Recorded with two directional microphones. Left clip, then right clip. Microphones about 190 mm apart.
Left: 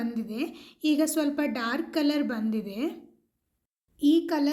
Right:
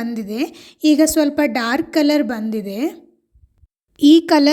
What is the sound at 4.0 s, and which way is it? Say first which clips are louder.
Speech: right 12 dB; 50° right (ahead or behind).